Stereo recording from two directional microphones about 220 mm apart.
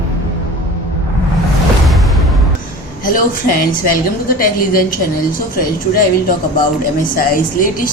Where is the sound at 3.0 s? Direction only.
40° left (ahead or behind).